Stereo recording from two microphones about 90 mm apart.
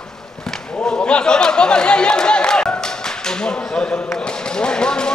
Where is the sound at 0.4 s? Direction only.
5° left (ahead or behind).